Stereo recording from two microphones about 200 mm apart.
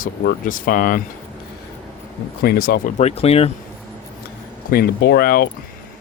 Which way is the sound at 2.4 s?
50° left (ahead or behind).